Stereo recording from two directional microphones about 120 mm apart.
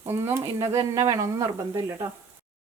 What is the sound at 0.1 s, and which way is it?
Speech, 25° right (ahead or behind).